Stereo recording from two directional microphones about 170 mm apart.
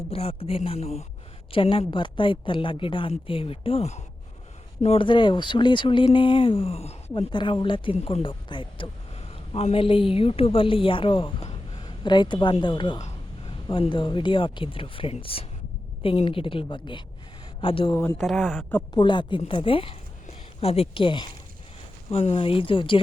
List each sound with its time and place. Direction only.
0.1 s a woman's voice: 35° left (ahead or behind)
7.1 s a woman's voice: 25° left (ahead or behind)
17.9 s speech: 15° left (ahead or behind)
18.2 s speech: centre (ahead or behind)
18.9 s a woman's voice: 25° left (ahead or behind)